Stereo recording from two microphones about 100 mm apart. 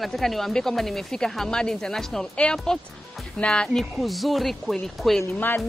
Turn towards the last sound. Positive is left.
turn(degrees=20)  # may be behind; listen again after turning